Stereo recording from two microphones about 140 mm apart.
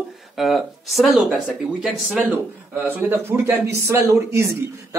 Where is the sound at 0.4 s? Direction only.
Centre (ahead or behind).